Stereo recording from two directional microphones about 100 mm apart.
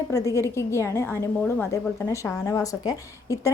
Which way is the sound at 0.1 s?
30° left (ahead or behind).